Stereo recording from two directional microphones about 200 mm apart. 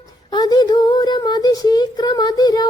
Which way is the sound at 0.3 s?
20° left (ahead or behind).